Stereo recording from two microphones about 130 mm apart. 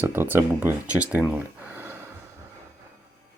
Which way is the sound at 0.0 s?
15° right (ahead or behind).